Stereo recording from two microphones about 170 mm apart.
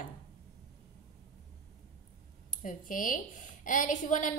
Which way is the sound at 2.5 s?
50° left (ahead or behind).